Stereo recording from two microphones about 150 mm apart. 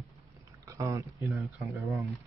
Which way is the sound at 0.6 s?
20° right (ahead or behind).